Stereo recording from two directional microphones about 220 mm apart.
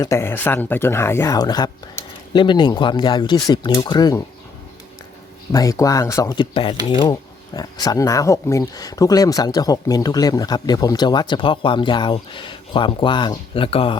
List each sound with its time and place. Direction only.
0.0 s speech: 10° left (ahead or behind)
5.5 s speech: 15° left (ahead or behind)